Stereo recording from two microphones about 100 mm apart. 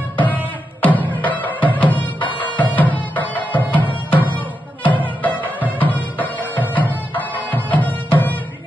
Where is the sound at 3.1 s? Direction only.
15° left (ahead or behind).